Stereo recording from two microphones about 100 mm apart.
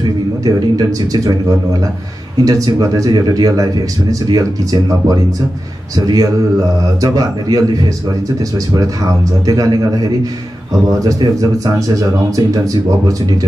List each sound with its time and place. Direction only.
0.0 s speech: 40° right (ahead or behind)
2.4 s speech: 35° right (ahead or behind)